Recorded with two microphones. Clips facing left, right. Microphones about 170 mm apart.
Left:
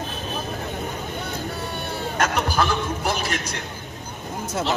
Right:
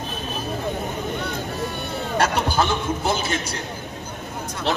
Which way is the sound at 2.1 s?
30° right (ahead or behind).